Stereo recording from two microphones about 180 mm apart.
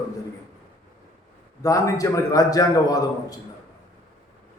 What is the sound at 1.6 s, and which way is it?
A man's voice, 20° left (ahead or behind).